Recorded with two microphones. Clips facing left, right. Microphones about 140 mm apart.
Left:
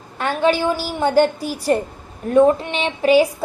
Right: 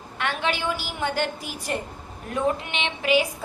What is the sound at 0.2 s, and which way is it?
A woman's voice, 35° left (ahead or behind).